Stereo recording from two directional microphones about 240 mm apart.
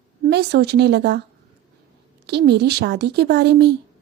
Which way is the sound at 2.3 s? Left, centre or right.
Right.